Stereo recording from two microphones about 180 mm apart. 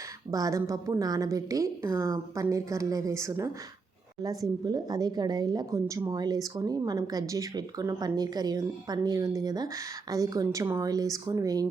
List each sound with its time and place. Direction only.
0.3 s a woman's voice: 20° right (ahead or behind)